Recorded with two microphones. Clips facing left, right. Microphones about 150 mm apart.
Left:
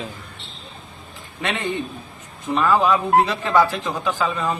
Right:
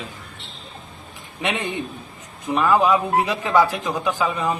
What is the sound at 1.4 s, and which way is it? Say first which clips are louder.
Speech: even; 15° right (ahead or behind).